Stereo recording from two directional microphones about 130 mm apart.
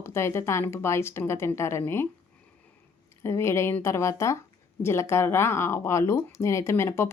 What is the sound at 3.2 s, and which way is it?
A woman's voice, 20° left (ahead or behind).